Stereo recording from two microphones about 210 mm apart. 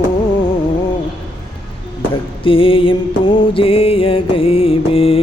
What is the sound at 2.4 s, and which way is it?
Music, 25° left (ahead or behind).